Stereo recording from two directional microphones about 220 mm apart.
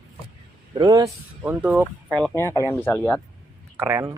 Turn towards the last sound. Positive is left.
turn(degrees=-10)  # may be behind; listen again after turning